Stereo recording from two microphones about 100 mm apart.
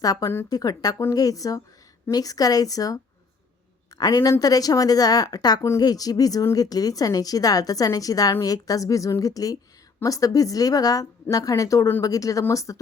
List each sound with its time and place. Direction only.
0.0 s a woman's voice: 35° left (ahead or behind)